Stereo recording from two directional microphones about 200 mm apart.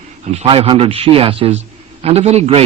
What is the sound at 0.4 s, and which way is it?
Speech, 25° right (ahead or behind).